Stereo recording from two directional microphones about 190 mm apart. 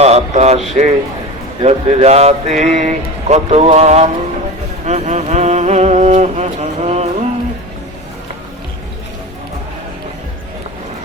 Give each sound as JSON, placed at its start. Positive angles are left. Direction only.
{"t": 0.0, "sound": "a sound", "side_deg": -35}
{"t": 0.7, "sound": "speech", "side_deg": -35}
{"t": 4.9, "sound": "music", "side_deg": -35}